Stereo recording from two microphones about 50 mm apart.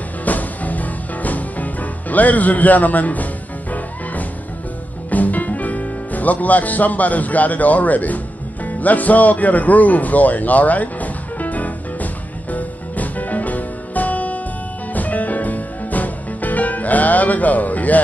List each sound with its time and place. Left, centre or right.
0.2 s music: left
5.1 s speech: left
8.6 s music: left